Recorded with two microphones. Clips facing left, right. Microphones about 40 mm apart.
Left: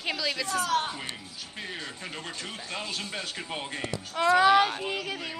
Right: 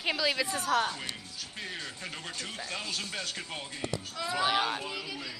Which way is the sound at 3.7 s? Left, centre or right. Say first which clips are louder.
Left 3 dB; left.